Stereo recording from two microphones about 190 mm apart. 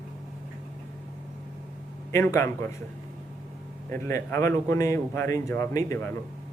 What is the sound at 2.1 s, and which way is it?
Speech, 15° left (ahead or behind).